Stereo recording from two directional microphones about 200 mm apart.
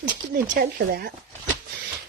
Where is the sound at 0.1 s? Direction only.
40° right (ahead or behind).